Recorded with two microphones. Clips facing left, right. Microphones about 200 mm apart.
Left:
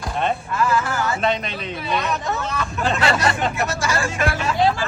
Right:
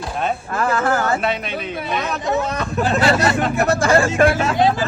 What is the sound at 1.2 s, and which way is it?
Speech, 5° right (ahead or behind).